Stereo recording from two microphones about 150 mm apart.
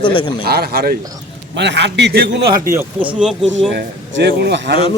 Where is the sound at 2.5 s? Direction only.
20° right (ahead or behind).